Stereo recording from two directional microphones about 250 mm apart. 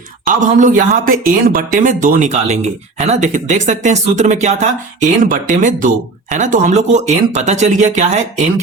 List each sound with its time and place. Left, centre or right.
0.3 s speech: right